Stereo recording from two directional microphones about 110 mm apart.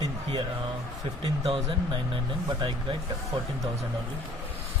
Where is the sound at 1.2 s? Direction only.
50° right (ahead or behind).